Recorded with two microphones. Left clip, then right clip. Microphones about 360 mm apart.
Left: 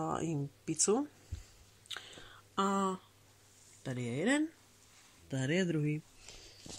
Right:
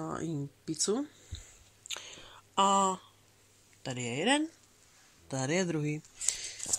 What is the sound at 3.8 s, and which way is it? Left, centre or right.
Speech, centre.